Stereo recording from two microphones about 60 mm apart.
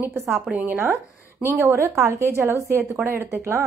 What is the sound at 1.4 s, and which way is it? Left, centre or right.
A woman's voice, right.